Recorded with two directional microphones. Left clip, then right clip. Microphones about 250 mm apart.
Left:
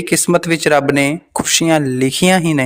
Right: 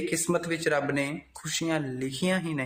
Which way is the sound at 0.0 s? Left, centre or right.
Left.